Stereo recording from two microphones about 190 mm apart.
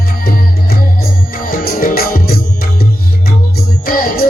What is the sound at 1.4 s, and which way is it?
Music, 50° left (ahead or behind).